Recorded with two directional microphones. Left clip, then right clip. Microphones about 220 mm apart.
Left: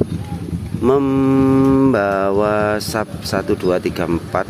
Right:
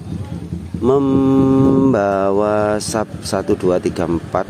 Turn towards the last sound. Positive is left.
turn(degrees=-10)  # may be behind; listen again after turning